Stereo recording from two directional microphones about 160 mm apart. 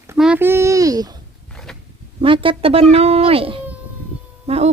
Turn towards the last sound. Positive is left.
turn(degrees=-40)  # may be behind; listen again after turning